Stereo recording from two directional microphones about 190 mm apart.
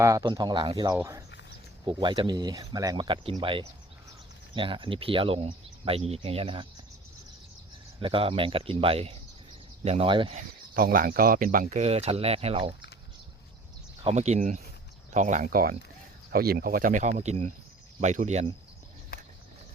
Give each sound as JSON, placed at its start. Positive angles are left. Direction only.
{"t": 0.0, "sound": "speech", "side_deg": -20}
{"t": 8.0, "sound": "speech", "side_deg": -30}
{"t": 10.8, "sound": "speech", "side_deg": -50}
{"t": 14.0, "sound": "speech", "side_deg": -35}